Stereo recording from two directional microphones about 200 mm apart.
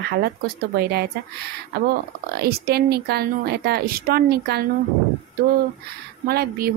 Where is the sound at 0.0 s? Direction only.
55° right (ahead or behind).